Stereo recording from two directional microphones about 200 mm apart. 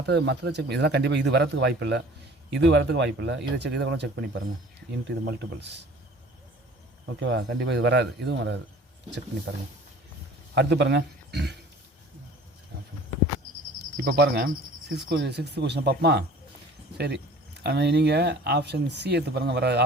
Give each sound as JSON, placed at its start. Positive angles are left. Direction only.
{"t": 0.0, "sound": "speech", "side_deg": -60}
{"t": 7.0, "sound": "speech", "side_deg": -65}
{"t": 10.5, "sound": "a man's voice", "side_deg": -60}
{"t": 13.9, "sound": "speech", "side_deg": -55}